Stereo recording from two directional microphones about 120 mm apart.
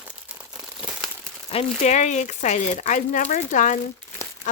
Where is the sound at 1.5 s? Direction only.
75° left (ahead or behind).